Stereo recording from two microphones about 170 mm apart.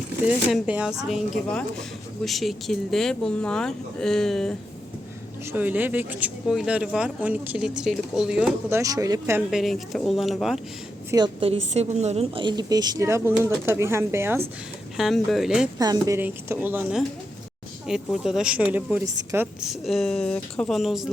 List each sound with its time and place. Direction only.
0.3 s speech: 5° right (ahead or behind)
5.5 s speech: 10° right (ahead or behind)
8.8 s a woman's voice: 20° right (ahead or behind)
9.5 s speech: centre (ahead or behind)
11.1 s a woman's voice: 30° right (ahead or behind)
14.9 s speech: centre (ahead or behind)
15.8 s speech: 20° right (ahead or behind); by 21.1 s centre (ahead or behind)